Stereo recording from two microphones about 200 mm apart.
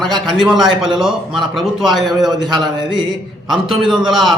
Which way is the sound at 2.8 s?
20° right (ahead or behind).